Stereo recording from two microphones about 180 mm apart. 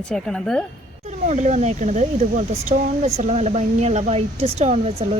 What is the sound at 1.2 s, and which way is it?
Speech, 40° right (ahead or behind).